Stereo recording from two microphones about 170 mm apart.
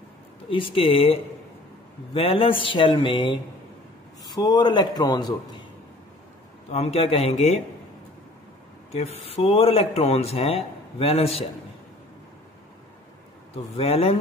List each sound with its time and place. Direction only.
0.7 s speech: 30° left (ahead or behind)
2.1 s a man's voice: 30° left (ahead or behind)
6.7 s speech: 35° left (ahead or behind)
8.9 s speech: 40° left (ahead or behind)
13.7 s speech: 35° left (ahead or behind)